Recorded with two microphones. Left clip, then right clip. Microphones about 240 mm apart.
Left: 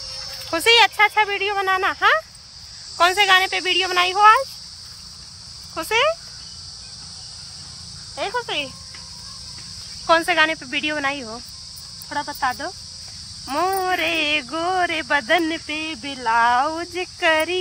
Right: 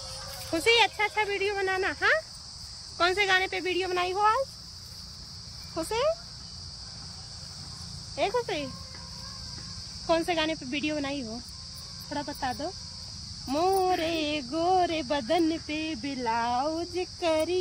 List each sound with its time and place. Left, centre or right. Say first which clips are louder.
0.7 s speech: left 9 dB; centre
3.8 s speech: left 12 dB; left
5.8 s speech: left 8 dB; left
8.2 s speech: left 3 dB; left
10.0 s speech: left 10 dB; left